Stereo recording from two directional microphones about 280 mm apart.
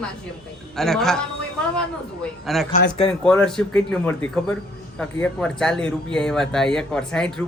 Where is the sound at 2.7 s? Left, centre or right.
Left.